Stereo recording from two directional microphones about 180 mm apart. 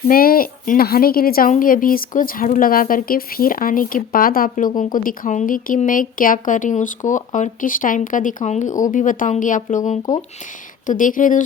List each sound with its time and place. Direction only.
0.1 s a woman's voice: 55° left (ahead or behind)